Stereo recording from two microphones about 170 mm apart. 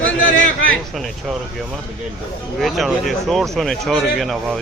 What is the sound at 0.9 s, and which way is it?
Speech, centre (ahead or behind).